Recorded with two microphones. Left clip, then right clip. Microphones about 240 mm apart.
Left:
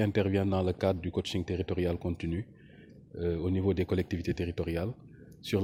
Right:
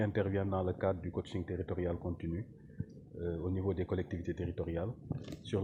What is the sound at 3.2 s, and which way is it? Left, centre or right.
Speech, left.